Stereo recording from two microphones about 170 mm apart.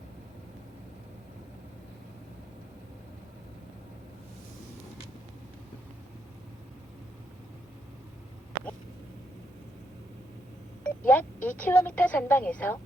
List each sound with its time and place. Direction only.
10.8 s speech: 10° left (ahead or behind)